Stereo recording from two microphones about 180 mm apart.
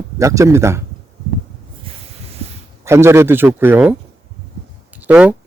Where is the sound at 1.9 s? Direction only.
30° right (ahead or behind).